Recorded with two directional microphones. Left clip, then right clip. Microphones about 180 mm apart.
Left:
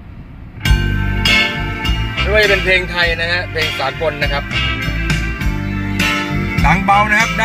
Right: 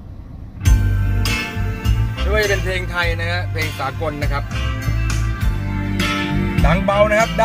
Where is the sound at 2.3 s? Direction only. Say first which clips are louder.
Left 7 dB; 15° left (ahead or behind).